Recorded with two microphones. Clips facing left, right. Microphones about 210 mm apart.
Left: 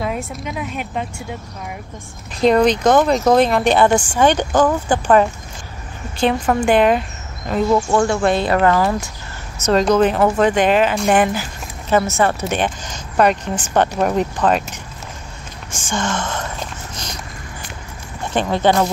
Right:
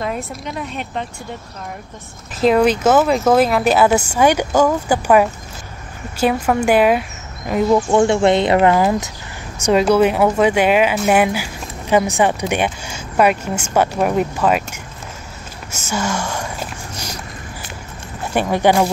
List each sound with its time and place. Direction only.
0.5 s speech: 5° left (ahead or behind)
2.4 s speech: 5° right (ahead or behind)
7.9 s speech: 25° right (ahead or behind); by 14.8 s 5° right (ahead or behind)
15.7 s a sound: 10° right (ahead or behind)
18.2 s speech: 10° right (ahead or behind)